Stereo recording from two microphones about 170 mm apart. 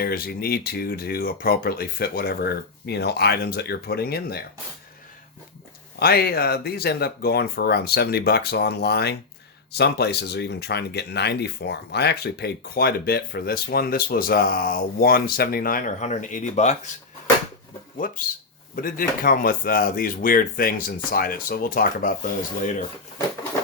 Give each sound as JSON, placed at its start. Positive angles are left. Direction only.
{"t": 0.0, "sound": "speech", "side_deg": 60}
{"t": 6.0, "sound": "speech", "side_deg": 65}
{"t": 18.0, "sound": "speech", "side_deg": 55}